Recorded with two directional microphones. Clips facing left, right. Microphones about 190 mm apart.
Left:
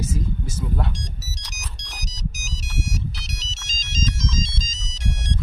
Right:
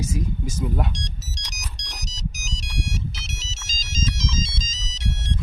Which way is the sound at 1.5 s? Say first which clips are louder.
Even; 5° left (ahead or behind).